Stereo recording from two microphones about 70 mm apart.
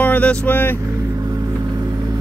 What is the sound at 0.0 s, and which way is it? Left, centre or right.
Speech, left.